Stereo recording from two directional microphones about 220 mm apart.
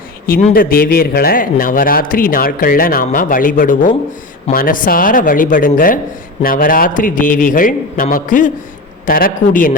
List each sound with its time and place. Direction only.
0.3 s a man's voice: 40° left (ahead or behind)